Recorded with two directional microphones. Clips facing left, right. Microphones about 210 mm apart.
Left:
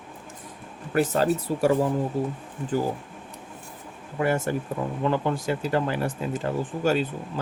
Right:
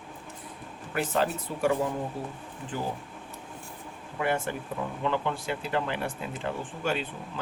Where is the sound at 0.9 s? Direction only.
40° left (ahead or behind).